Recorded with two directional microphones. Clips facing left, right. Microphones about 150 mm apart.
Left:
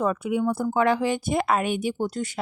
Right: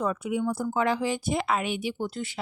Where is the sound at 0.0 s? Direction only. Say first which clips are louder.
Left 4 dB; 55° left (ahead or behind).